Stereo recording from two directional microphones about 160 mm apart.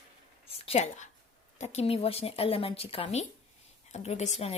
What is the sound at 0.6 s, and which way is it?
A woman's voice, 45° left (ahead or behind).